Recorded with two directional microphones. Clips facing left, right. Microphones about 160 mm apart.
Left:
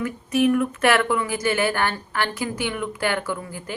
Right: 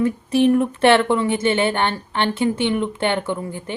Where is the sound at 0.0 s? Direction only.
30° right (ahead or behind).